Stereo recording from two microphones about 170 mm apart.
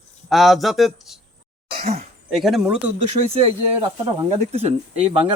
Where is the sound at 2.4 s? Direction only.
Centre (ahead or behind).